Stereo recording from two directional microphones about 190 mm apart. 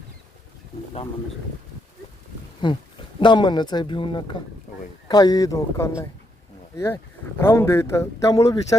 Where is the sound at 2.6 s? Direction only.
25° left (ahead or behind).